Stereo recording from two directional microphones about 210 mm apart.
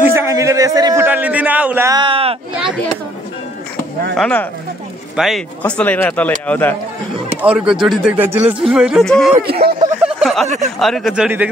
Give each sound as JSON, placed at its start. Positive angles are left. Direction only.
{"t": 0.0, "sound": "a man's voice", "side_deg": -10}
{"t": 2.5, "sound": "speech", "side_deg": -5}
{"t": 4.2, "sound": "speech", "side_deg": 5}
{"t": 7.4, "sound": "speech", "side_deg": -5}
{"t": 9.4, "sound": "speech", "side_deg": -45}
{"t": 10.0, "sound": "a sound", "side_deg": 0}
{"t": 10.8, "sound": "speech", "side_deg": 0}